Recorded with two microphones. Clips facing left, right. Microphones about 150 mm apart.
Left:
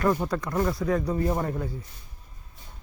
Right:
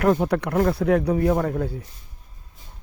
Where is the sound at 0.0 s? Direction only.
70° right (ahead or behind).